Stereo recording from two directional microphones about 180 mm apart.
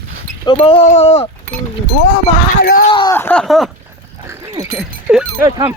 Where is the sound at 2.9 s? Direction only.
25° left (ahead or behind).